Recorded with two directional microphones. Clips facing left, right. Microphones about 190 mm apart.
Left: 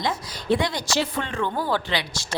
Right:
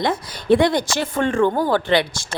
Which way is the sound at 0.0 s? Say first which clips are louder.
Right 5 dB; 55° right (ahead or behind).